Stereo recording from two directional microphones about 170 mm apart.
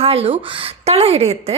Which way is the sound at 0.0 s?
35° right (ahead or behind).